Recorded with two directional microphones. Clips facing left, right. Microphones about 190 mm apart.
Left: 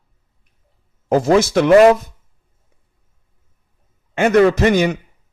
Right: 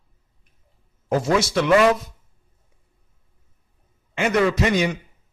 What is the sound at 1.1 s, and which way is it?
Speech, 45° left (ahead or behind).